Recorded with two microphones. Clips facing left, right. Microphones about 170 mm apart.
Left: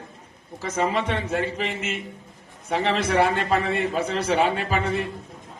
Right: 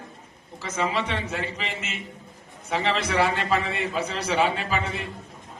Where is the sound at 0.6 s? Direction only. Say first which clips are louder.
Left 3 dB; 50° left (ahead or behind).